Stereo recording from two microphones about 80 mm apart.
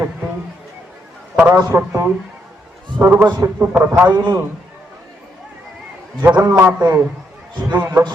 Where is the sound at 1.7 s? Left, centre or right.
Right.